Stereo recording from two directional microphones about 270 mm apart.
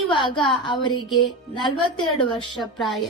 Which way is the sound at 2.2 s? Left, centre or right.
Centre.